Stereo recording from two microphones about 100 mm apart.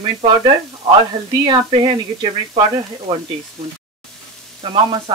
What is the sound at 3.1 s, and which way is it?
Speech, 70° right (ahead or behind).